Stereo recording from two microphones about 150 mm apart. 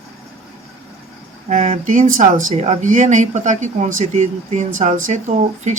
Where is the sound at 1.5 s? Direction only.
50° right (ahead or behind).